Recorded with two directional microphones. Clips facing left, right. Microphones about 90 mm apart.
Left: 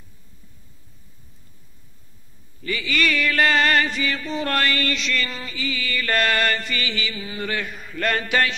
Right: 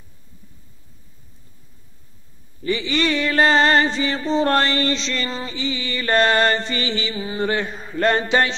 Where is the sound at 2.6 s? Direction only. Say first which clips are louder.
Right 3 dB; 25° right (ahead or behind).